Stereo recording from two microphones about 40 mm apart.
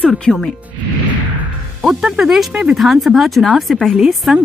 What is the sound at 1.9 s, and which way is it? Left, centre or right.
Speech, centre.